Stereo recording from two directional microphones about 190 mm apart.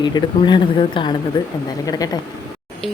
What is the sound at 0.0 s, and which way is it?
Speech, 25° left (ahead or behind).